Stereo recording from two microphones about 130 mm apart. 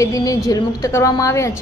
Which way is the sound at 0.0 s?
25° left (ahead or behind).